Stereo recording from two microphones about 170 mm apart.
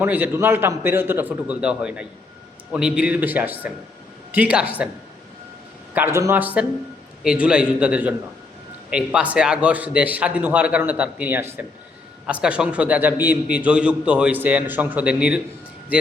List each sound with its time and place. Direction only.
0.0 s a man's voice: 10° right (ahead or behind)
5.9 s a man's voice: 15° right (ahead or behind)